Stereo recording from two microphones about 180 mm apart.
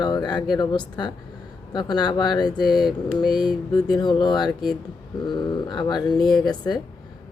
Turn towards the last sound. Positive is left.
turn(degrees=25)  # may be behind; listen again after turning